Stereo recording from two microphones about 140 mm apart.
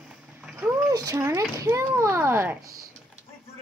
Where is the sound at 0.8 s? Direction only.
25° right (ahead or behind).